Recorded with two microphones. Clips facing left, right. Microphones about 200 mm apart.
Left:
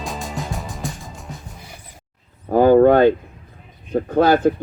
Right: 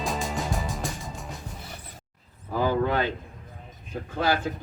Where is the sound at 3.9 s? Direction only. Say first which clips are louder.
Left 11 dB; 50° left (ahead or behind).